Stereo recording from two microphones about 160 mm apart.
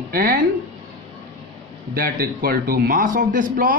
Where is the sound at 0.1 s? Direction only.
70° right (ahead or behind).